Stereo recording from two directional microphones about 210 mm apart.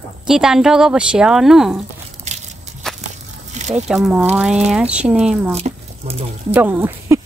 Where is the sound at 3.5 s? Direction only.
35° right (ahead or behind).